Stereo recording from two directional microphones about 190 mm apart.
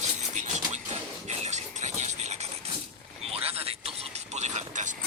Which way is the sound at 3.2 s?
30° right (ahead or behind).